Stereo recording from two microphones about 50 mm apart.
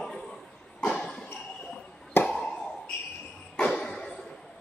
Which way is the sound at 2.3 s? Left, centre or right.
Centre.